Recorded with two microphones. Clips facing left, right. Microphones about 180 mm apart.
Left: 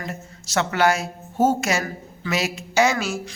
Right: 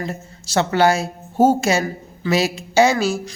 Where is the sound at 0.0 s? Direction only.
30° right (ahead or behind).